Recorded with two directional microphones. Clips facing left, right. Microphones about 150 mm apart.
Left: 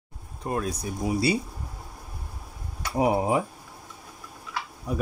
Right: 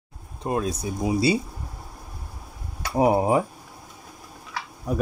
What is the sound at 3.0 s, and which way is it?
Speech, 40° right (ahead or behind).